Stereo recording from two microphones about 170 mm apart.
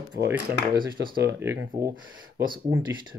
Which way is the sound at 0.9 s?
60° right (ahead or behind).